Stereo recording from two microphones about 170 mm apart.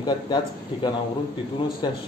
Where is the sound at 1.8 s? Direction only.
25° left (ahead or behind).